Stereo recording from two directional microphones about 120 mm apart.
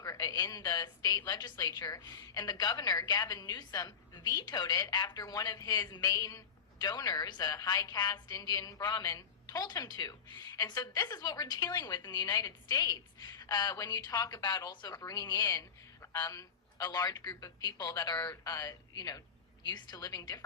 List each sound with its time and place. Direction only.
0.0 s a woman's voice: 30° left (ahead or behind)